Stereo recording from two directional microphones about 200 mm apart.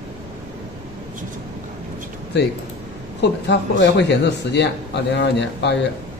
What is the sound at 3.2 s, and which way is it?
A man's voice, 60° left (ahead or behind).